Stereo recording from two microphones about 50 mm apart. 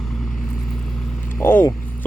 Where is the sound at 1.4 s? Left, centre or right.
Left.